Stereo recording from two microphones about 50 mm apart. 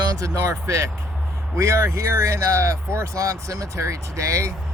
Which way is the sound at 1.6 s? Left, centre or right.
Right.